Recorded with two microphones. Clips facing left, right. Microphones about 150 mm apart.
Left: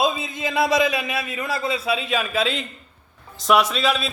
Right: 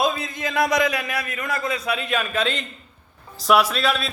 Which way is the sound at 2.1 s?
5° left (ahead or behind).